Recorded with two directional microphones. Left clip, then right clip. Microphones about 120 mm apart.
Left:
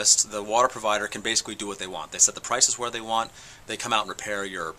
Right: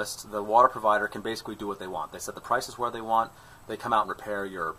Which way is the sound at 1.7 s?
40° left (ahead or behind).